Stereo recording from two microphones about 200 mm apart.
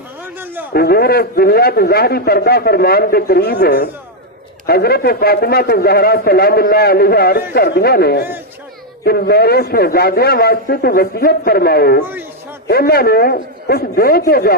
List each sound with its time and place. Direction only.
0.7 s a man's voice: 50° left (ahead or behind)